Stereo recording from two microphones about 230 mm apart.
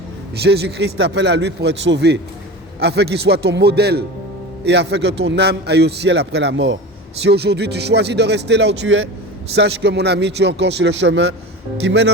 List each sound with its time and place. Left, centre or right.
0.4 s speech: right